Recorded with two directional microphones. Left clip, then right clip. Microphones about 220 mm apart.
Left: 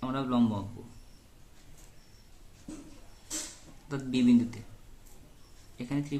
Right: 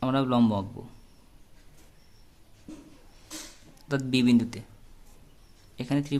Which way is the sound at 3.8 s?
50° right (ahead or behind).